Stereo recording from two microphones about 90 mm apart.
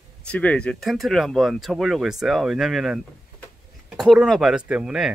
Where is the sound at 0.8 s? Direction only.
Centre (ahead or behind).